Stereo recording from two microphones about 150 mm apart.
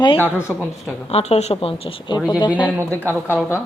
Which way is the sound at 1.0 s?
45° left (ahead or behind).